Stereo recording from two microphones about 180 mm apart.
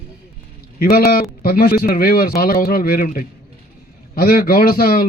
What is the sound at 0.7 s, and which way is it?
A man's voice, 60° left (ahead or behind).